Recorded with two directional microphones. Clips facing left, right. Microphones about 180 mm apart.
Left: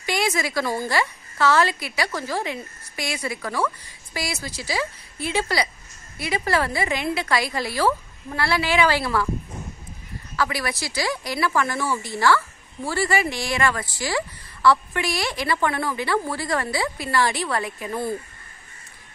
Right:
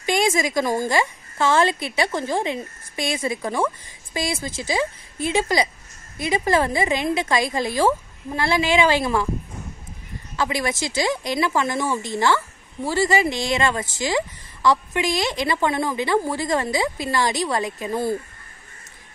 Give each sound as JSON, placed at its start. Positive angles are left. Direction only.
{"t": 0.0, "sound": "speech", "side_deg": -20}
{"t": 10.3, "sound": "speech", "side_deg": -20}